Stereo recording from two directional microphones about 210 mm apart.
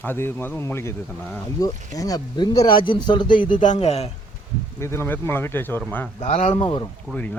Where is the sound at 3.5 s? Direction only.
35° left (ahead or behind).